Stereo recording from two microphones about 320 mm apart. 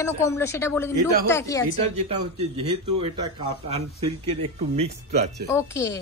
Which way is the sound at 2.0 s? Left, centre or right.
Centre.